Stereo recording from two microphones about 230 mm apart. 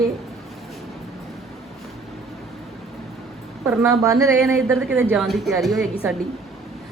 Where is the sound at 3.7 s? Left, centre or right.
Centre.